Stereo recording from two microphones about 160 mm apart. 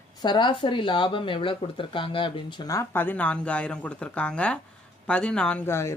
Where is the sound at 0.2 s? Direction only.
30° left (ahead or behind).